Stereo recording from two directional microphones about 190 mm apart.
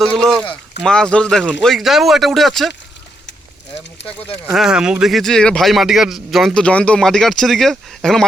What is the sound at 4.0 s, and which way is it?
Speech, 65° left (ahead or behind).